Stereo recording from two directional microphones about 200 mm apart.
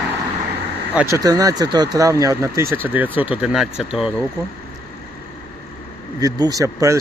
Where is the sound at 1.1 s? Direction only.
20° right (ahead or behind).